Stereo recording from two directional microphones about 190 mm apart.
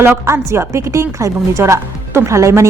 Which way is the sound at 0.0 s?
10° right (ahead or behind).